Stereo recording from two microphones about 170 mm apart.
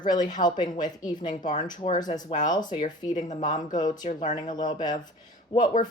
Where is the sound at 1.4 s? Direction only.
45° left (ahead or behind).